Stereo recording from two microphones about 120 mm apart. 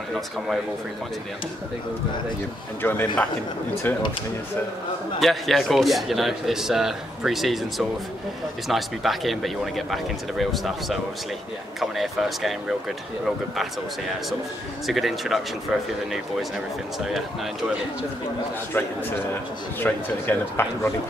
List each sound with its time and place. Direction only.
2.8 s a man's voice: 15° left (ahead or behind)
5.2 s a man's voice: centre (ahead or behind)
14.9 s a man's voice: centre (ahead or behind)
18.7 s a man's voice: 20° left (ahead or behind)